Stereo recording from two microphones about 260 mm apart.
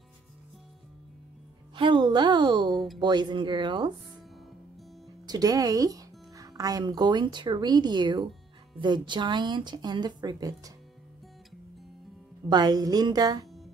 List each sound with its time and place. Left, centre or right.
1.8 s speech: centre
5.2 s speech: centre
12.4 s speech: centre